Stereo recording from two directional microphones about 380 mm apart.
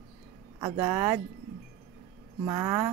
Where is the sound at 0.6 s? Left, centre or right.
Centre.